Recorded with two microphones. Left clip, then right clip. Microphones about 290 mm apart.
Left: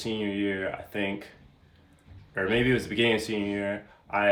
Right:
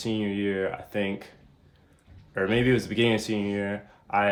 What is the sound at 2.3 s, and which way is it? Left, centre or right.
Speech, centre.